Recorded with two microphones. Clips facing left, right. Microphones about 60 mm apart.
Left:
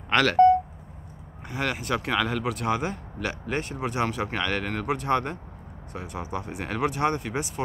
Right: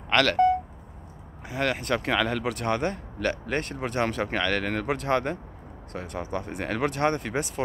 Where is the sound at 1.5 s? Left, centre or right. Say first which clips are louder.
Right 1 dB; centre.